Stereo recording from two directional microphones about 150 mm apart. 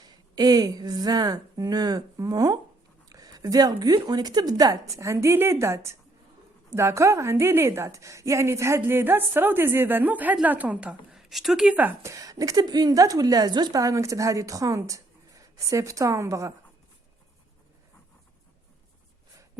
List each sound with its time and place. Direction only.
0.0 s a woman's voice: 25° right (ahead or behind)